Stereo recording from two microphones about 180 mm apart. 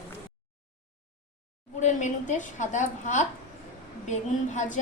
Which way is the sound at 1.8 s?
45° left (ahead or behind).